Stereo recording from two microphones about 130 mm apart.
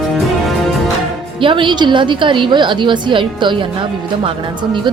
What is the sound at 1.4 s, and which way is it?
A woman's voice, 40° right (ahead or behind).